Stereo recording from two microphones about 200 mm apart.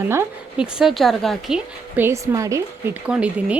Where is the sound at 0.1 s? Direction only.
10° right (ahead or behind).